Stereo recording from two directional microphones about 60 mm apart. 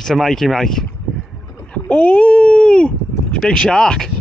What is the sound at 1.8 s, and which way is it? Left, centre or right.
Speech, left.